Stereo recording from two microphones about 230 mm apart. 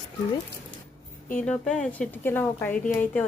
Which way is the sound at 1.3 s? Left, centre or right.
Centre.